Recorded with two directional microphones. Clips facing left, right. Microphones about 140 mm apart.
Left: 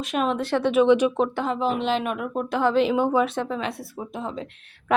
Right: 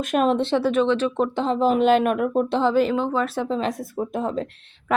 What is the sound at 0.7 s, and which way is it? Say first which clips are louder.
Speech: left 7 dB; 10° left (ahead or behind).